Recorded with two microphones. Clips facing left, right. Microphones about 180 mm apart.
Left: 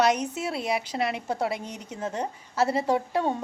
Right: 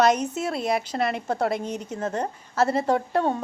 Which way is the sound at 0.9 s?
50° right (ahead or behind).